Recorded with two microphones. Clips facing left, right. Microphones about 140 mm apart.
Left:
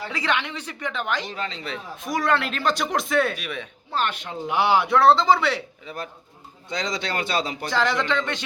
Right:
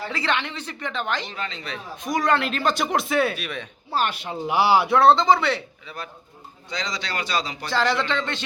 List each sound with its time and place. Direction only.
0.1 s a woman's voice: 10° left (ahead or behind)
1.4 s speech: 35° left (ahead or behind)
2.0 s speech: centre (ahead or behind)
3.3 s a woman's voice: 10° left (ahead or behind)
3.9 s speech: 10° right (ahead or behind); by 5.6 s 10° left (ahead or behind)
6.7 s speech: 50° left (ahead or behind)
7.7 s a woman's voice: 15° left (ahead or behind)